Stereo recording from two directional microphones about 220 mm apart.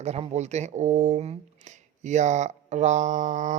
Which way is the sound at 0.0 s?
30° right (ahead or behind).